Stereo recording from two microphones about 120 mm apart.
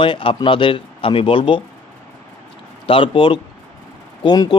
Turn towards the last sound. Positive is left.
turn(degrees=35)  # may be behind; listen again after turning